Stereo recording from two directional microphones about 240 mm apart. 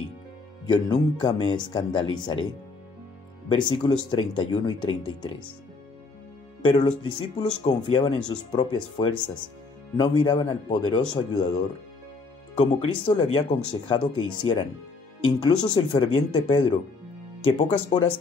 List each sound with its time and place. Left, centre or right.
0.7 s a man's voice: centre
3.4 s speech: centre
6.6 s a man's voice: left
12.5 s speech: left